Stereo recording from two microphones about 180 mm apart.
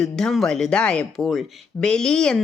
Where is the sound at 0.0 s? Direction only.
Centre (ahead or behind).